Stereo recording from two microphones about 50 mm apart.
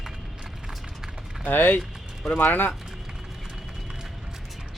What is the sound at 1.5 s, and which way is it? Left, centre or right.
Speech, left.